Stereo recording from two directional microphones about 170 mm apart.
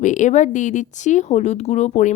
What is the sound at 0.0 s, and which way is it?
Speech, 45° left (ahead or behind).